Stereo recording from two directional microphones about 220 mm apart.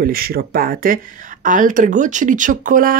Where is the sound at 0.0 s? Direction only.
40° right (ahead or behind).